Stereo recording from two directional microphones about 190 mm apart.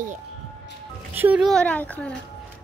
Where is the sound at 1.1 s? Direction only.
10° right (ahead or behind).